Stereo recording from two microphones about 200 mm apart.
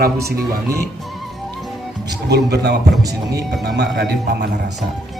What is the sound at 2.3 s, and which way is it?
A man's voice, 55° right (ahead or behind).